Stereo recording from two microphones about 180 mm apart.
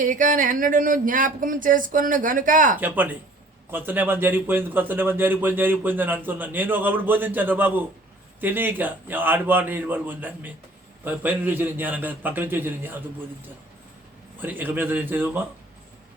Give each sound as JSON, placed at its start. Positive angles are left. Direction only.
{"t": 0.0, "sound": "speech", "side_deg": -45}
{"t": 2.8, "sound": "a man's voice", "side_deg": -10}
{"t": 14.4, "sound": "a man's voice", "side_deg": -10}